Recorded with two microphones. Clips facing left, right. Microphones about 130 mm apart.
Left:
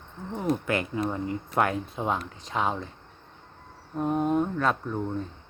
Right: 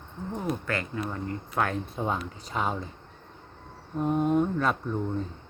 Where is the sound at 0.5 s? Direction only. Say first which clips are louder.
Left 4 dB; 15° left (ahead or behind); by 2.7 s centre (ahead or behind).